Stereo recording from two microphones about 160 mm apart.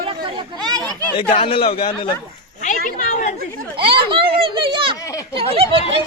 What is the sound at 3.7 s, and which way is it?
Children playing, 35° right (ahead or behind).